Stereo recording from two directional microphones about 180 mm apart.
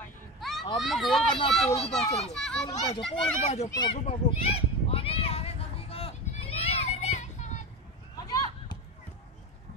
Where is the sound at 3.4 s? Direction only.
40° left (ahead or behind).